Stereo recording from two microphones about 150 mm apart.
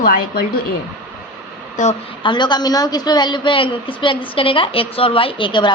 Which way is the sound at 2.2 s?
30° left (ahead or behind).